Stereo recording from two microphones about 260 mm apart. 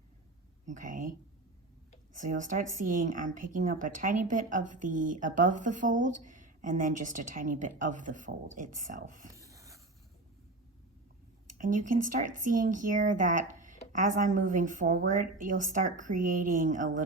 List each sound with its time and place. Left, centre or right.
0.6 s a woman's voice: right
2.1 s a woman's voice: right
9.3 s rub: centre
11.5 s a woman's voice: right